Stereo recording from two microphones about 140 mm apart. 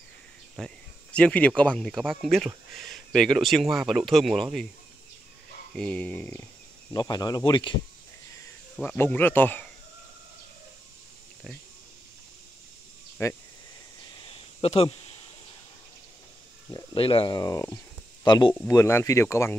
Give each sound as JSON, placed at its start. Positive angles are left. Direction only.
{"t": 0.6, "sound": "speech", "side_deg": 5}
{"t": 5.8, "sound": "speech", "side_deg": 5}
{"t": 6.9, "sound": "speech", "side_deg": 25}
{"t": 8.8, "sound": "speech", "side_deg": 15}
{"t": 13.2, "sound": "speech", "side_deg": 20}
{"t": 14.1, "sound": "a sound", "side_deg": 40}
{"t": 16.7, "sound": "speech", "side_deg": 40}
{"t": 17.4, "sound": "speech", "side_deg": 25}
{"t": 18.7, "sound": "speech", "side_deg": 20}